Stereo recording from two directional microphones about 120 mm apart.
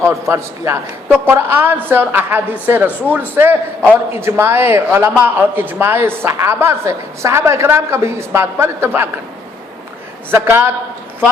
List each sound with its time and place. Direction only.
0.0 s a woman's voice: 25° right (ahead or behind)
10.3 s a man's voice: 20° right (ahead or behind)